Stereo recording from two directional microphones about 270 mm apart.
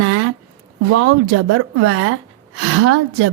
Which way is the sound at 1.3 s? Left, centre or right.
Right.